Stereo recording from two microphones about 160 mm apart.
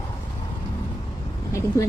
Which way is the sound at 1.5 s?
20° left (ahead or behind).